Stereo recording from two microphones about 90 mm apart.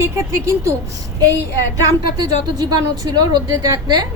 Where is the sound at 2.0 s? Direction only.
50° right (ahead or behind).